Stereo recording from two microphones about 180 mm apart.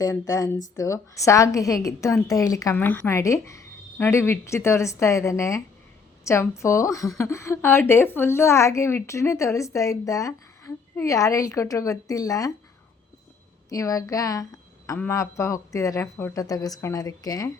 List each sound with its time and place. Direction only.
0.0 s a woman's voice: 20° left (ahead or behind)
13.7 s a woman's voice: 20° left (ahead or behind)